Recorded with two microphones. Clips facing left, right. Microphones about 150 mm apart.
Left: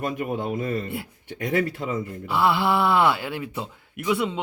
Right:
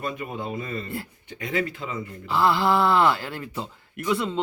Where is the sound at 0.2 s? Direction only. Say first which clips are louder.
Left 5 dB; 50° left (ahead or behind).